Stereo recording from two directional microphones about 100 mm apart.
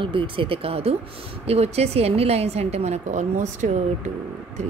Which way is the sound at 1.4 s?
90° right.